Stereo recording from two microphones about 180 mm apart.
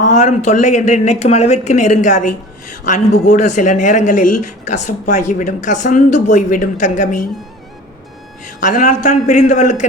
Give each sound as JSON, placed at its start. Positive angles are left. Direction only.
{"t": 0.0, "sound": "speech", "side_deg": 45}
{"t": 8.4, "sound": "speech", "side_deg": 45}